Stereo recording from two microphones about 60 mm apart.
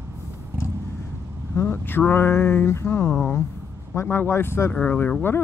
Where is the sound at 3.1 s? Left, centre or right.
Centre.